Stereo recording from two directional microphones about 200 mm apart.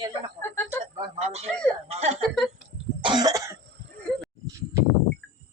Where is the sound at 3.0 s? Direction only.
20° right (ahead or behind).